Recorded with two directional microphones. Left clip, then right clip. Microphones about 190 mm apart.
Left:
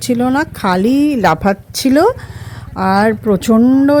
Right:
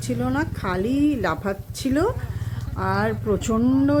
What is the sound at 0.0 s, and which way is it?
A woman's voice, 45° left (ahead or behind).